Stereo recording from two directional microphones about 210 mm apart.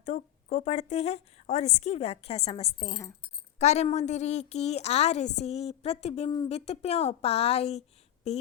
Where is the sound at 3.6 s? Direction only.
30° left (ahead or behind).